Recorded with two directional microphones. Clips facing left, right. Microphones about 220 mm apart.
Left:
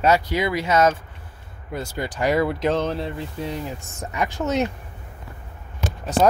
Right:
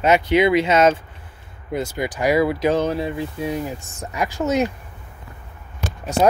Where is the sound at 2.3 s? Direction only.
10° right (ahead or behind).